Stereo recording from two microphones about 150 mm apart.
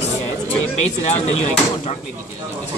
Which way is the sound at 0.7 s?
50° left (ahead or behind).